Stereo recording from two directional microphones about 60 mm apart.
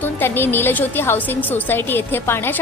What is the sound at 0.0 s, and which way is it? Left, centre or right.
A woman's voice, left.